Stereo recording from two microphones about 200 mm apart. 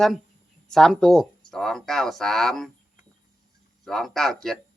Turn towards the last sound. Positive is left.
turn(degrees=0)  # may be behind; listen again after turning